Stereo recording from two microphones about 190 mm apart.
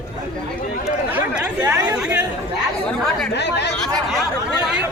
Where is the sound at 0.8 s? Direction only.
5° right (ahead or behind).